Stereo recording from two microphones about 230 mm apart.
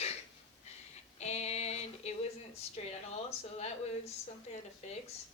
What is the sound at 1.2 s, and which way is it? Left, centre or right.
Speech, left.